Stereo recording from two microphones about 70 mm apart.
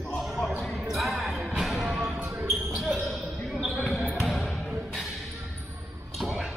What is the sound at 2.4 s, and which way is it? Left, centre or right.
Basketball bounce, centre.